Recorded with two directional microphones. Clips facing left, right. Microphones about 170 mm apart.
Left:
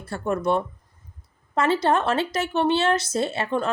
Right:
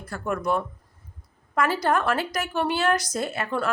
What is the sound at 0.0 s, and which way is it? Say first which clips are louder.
A woman's voice: left 3 dB; 25° left (ahead or behind).